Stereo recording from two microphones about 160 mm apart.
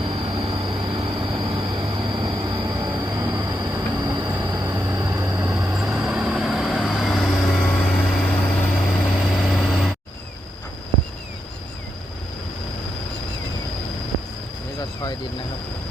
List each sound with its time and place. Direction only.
0.0 s vehicle: 35° right (ahead or behind)
1.8 s train: 30° right (ahead or behind); by 9.9 s centre (ahead or behind)